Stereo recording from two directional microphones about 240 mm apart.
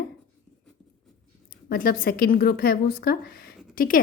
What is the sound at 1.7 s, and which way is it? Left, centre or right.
A woman's voice, left.